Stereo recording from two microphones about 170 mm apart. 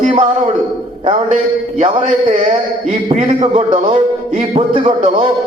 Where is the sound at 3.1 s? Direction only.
40° right (ahead or behind).